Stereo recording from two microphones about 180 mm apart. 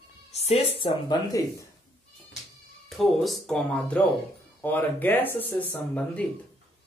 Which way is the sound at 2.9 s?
Centre (ahead or behind).